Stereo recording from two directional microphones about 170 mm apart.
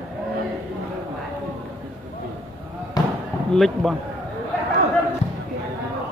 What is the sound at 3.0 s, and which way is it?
Fireworks, 20° left (ahead or behind).